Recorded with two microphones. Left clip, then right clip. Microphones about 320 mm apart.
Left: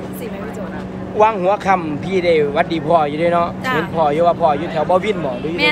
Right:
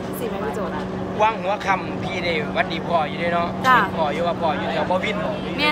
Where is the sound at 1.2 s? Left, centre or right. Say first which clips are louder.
Left 7 dB; centre.